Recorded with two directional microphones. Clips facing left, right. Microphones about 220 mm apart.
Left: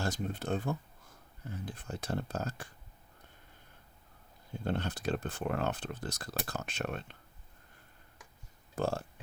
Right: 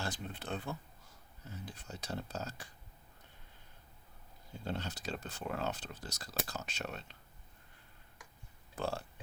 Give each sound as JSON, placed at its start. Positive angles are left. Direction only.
{"t": 0.0, "sound": "speech", "side_deg": 45}
{"t": 4.6, "sound": "speech", "side_deg": 55}
{"t": 8.7, "sound": "speech", "side_deg": 45}